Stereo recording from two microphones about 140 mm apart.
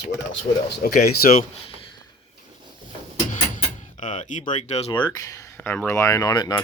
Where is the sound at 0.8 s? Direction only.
90° left.